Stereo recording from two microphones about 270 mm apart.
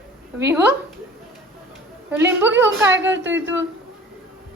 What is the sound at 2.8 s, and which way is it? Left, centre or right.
Speech, right.